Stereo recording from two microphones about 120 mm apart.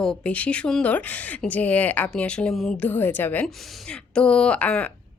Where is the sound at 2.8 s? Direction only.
15° left (ahead or behind).